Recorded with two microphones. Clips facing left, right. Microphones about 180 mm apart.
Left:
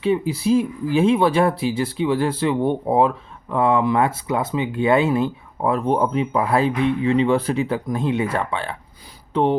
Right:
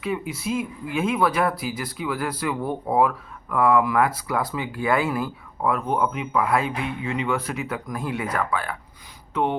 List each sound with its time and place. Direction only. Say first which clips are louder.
0.0 s speech: left 8 dB; 30° left (ahead or behind)